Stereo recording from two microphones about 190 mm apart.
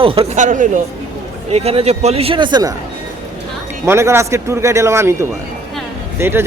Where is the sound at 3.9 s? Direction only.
15° right (ahead or behind).